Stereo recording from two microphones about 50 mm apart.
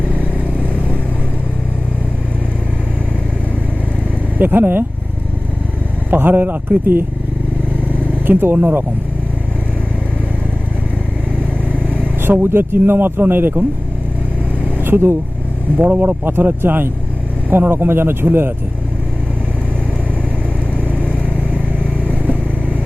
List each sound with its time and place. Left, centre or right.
0.1 s vehicle: right
4.4 s speech: right
6.1 s speech: right
8.3 s speech: right
12.2 s speech: right
14.6 s vehicle: right
15.8 s speech: right
20.8 s vehicle: right